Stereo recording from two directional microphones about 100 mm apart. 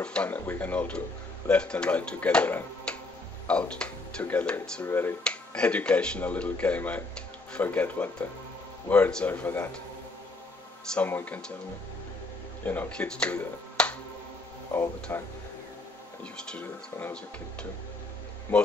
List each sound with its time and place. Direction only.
0.0 s speech: 10° left (ahead or behind)
5.2 s speech: 10° left (ahead or behind)
11.0 s speech: 20° left (ahead or behind)
12.6 s speech: 20° left (ahead or behind)
15.1 s speech: 20° left (ahead or behind)
16.5 s speech: 15° left (ahead or behind)